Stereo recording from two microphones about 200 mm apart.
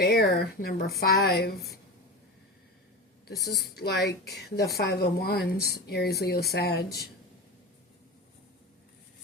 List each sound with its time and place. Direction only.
0.0 s speech: 50° left (ahead or behind)
3.4 s speech: 50° left (ahead or behind)